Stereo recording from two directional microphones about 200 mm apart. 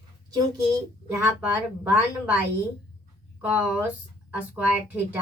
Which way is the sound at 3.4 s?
5° right (ahead or behind).